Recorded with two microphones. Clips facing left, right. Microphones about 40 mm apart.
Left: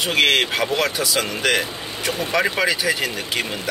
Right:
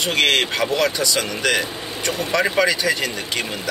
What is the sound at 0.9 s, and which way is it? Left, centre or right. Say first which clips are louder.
Speech: even; centre.